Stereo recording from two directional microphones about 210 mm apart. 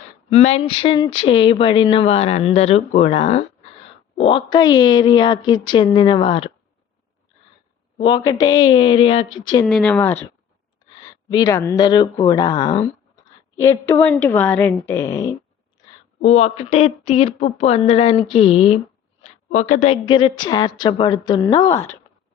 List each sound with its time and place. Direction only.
0.3 s speech: 30° left (ahead or behind)
8.0 s speech: 20° left (ahead or behind)
9.6 s speech: 5° left (ahead or behind)
11.3 s speech: 15° left (ahead or behind)
16.2 s a woman's voice: 30° left (ahead or behind); by 21.9 s 15° left (ahead or behind)